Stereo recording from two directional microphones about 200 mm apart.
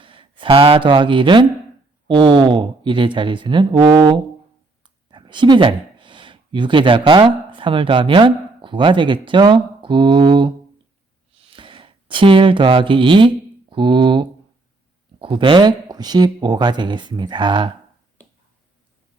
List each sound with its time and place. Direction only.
0.0 s a sound: 25° right (ahead or behind)
0.9 s speech: 25° right (ahead or behind)
11.5 s speech: 25° right (ahead or behind)